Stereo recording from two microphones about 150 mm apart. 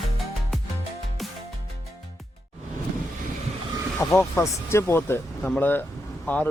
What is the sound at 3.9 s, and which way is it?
Speech, 15° left (ahead or behind).